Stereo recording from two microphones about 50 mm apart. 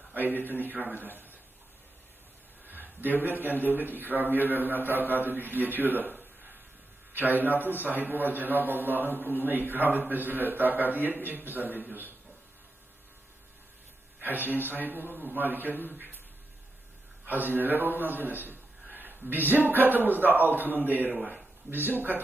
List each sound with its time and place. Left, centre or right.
0.1 s a man's voice: right
2.6 s a sound: right
3.6 s a man's voice: right
14.2 s a man's voice: right
17.2 s a man's voice: right